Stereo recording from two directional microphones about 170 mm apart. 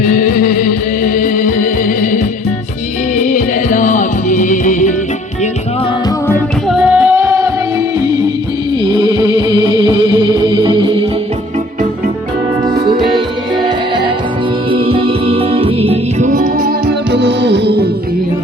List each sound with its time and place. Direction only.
0.0 s music: 50° left (ahead or behind)
6.7 s music: 5° right (ahead or behind)
8.8 s music: 25° right (ahead or behind)
13.1 s music: 30° right (ahead or behind)
16.3 s music: 50° right (ahead or behind); by 17.8 s 80° right